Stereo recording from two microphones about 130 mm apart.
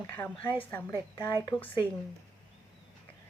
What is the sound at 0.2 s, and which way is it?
A woman's voice, 15° left (ahead or behind).